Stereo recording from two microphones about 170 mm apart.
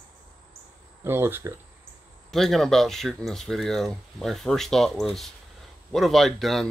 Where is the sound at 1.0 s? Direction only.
15° right (ahead or behind).